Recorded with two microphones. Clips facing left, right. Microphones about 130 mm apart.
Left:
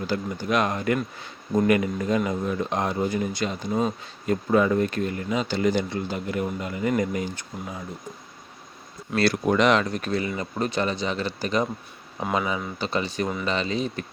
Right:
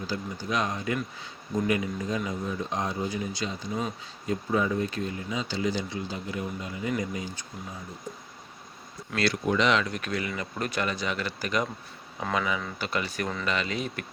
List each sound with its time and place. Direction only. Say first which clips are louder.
0.1 s speech: left 6 dB; 60° left (ahead or behind)
9.3 s speech: left 4 dB; 50° left (ahead or behind)
9.8 s speech: left 5 dB; 35° left (ahead or behind)